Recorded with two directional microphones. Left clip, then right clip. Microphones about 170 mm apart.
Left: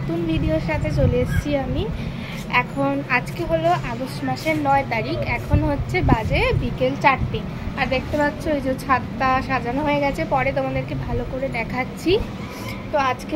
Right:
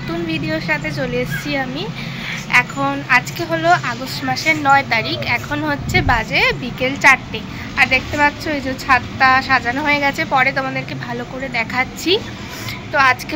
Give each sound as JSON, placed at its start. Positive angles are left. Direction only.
{"t": 0.3, "sound": "a woman's voice", "side_deg": 5}
{"t": 7.7, "sound": "speech", "side_deg": -15}
{"t": 9.2, "sound": "a woman's voice", "side_deg": 0}